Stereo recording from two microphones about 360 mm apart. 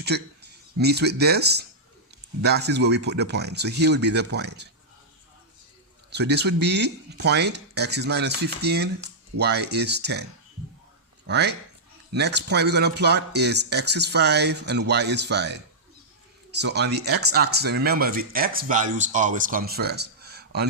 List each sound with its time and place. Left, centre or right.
0.1 s speech: right
6.1 s speech: right
11.3 s speech: right